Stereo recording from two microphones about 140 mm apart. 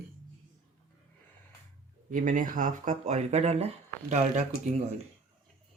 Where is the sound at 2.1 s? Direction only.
70° right (ahead or behind).